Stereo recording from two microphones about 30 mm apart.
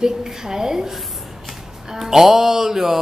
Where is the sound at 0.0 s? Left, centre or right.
Centre.